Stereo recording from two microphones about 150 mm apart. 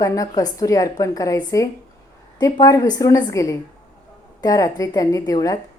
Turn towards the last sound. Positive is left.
turn(degrees=25)  # may be behind; listen again after turning